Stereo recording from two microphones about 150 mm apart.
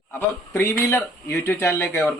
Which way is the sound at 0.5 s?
15° left (ahead or behind).